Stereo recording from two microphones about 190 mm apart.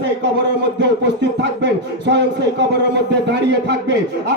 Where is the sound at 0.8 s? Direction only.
65° right (ahead or behind).